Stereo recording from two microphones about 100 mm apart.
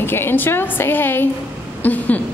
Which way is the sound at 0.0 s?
20° left (ahead or behind).